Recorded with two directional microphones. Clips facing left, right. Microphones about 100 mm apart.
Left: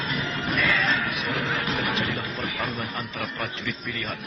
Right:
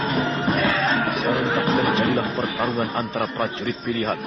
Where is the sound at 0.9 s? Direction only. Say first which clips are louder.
Right 6 dB; 40° right (ahead or behind).